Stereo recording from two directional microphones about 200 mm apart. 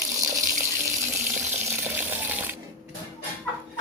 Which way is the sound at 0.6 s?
15° right (ahead or behind).